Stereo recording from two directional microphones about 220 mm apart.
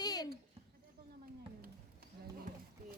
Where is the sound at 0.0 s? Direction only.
15° left (ahead or behind).